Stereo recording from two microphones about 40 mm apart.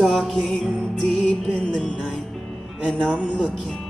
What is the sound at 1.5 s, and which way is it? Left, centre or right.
Music, centre.